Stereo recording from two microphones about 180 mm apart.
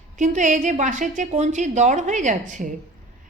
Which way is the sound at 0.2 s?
45° right (ahead or behind).